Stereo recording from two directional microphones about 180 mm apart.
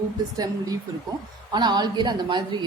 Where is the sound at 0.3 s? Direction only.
20° right (ahead or behind).